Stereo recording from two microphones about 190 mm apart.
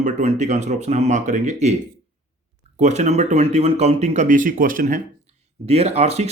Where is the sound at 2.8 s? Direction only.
35° right (ahead or behind).